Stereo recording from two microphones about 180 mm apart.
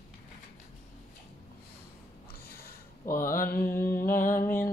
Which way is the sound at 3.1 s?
50° left (ahead or behind).